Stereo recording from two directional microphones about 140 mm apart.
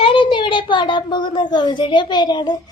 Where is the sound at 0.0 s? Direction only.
35° left (ahead or behind).